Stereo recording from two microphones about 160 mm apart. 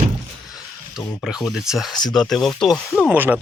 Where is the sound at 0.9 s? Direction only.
5° right (ahead or behind).